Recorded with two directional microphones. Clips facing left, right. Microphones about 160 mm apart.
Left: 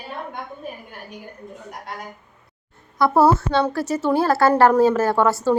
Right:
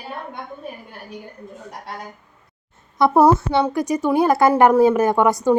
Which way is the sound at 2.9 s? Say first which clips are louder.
Right 2 dB; 20° right (ahead or behind).